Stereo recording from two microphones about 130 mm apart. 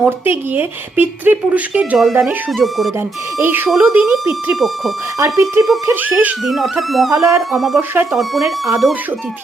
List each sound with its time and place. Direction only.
0.0 s speech: 15° right (ahead or behind)
3.3 s speech: 15° right (ahead or behind)
3.7 s speech: centre (ahead or behind)
5.2 s speech: 25° right (ahead or behind)
6.4 s speech: centre (ahead or behind)